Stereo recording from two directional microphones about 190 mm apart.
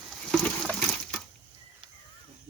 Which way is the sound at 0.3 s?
Centre (ahead or behind).